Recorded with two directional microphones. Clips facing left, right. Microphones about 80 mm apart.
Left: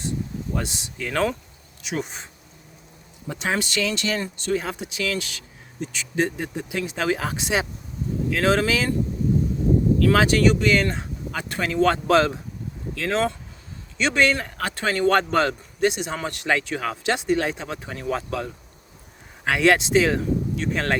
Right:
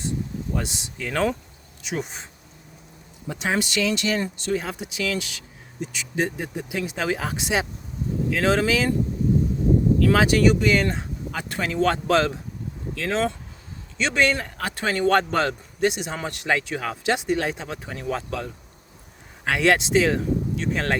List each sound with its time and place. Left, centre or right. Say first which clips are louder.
0.5 s speech: left 1 dB; centre
3.3 s speech: right 1 dB; centre
10.0 s speech: even; centre